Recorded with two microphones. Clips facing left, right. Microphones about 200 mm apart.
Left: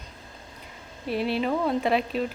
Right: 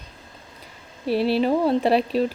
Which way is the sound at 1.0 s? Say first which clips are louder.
Right 6 dB; 35° right (ahead or behind).